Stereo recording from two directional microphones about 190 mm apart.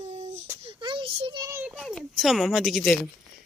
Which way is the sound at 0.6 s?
25° right (ahead or behind).